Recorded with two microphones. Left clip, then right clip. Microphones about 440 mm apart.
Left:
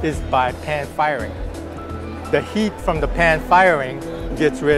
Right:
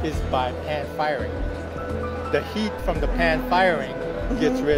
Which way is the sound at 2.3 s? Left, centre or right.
Left.